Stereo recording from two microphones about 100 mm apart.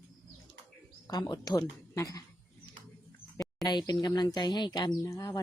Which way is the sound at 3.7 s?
45° left (ahead or behind).